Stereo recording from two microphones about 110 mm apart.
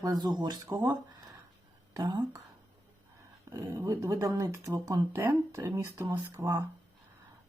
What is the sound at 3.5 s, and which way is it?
Speech, 35° right (ahead or behind).